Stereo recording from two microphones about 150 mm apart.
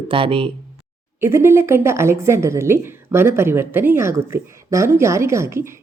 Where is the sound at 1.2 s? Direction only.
15° right (ahead or behind).